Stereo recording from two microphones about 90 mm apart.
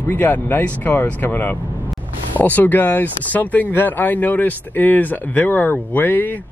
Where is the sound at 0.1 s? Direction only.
20° left (ahead or behind).